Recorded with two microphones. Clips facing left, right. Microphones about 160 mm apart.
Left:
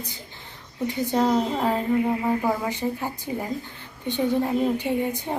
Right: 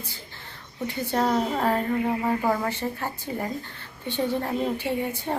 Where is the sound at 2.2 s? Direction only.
10° left (ahead or behind).